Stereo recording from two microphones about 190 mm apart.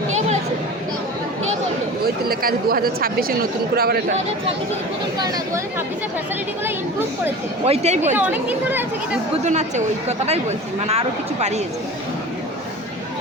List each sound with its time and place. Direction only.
2.0 s speech: 50° right (ahead or behind)
5.2 s speech: 20° right (ahead or behind)
7.6 s a woman's voice: 35° right (ahead or behind)
8.1 s speech: 10° right (ahead or behind)
9.3 s a woman's voice: 35° right (ahead or behind)